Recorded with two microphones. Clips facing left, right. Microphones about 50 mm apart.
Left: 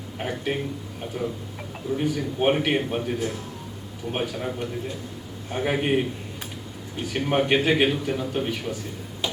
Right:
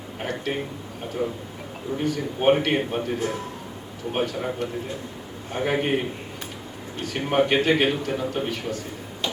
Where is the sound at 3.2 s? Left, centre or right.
Right.